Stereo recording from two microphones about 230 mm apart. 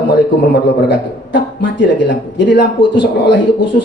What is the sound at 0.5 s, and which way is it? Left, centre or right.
Speech, left.